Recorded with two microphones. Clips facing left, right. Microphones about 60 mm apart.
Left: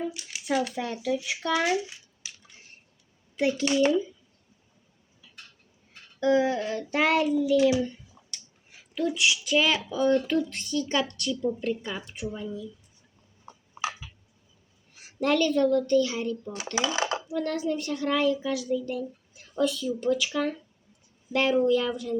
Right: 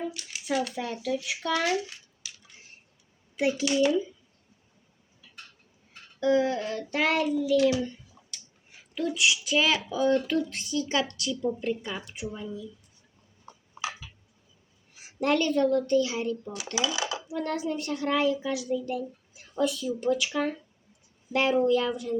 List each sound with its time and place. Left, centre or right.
0.0 s a sound: centre
0.3 s speech: centre
1.5 s a child's voice: centre
3.3 s speech: centre
6.1 s a sound: centre
6.4 s child singing: centre
9.1 s a woman's voice: centre
13.4 s tick-tock: left
14.9 s a sound: centre
15.4 s a woman's voice: centre
16.7 s dishes: left
17.3 s a woman's voice: centre